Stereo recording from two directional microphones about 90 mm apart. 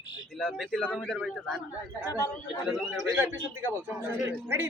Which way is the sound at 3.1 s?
25° right (ahead or behind).